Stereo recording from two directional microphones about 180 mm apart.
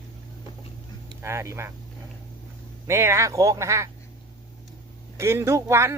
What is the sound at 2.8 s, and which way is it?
A man's voice, 15° right (ahead or behind).